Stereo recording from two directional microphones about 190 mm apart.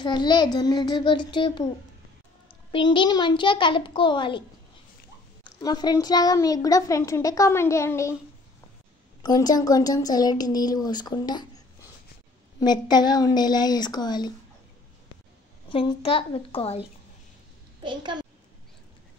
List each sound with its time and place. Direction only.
0.0 s a woman's voice: 25° left (ahead or behind)
2.7 s a woman's voice: 25° left (ahead or behind)
5.4 s a child's voice: 20° left (ahead or behind)
9.2 s a woman's voice: 20° left (ahead or behind)
15.7 s a woman's voice: 25° left (ahead or behind)
17.8 s a child's voice: 25° right (ahead or behind)